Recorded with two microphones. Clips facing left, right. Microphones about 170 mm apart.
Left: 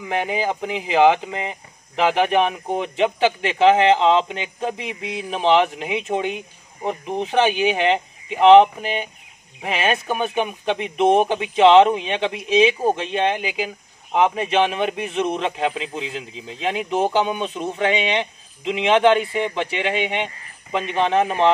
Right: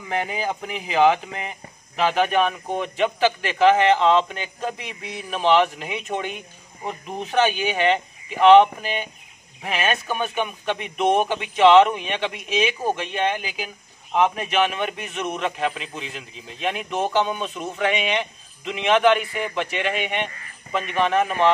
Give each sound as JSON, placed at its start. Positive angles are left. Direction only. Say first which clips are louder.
{"t": 0.1, "sound": "speech", "louder": "left 3 dB", "side_deg": 20}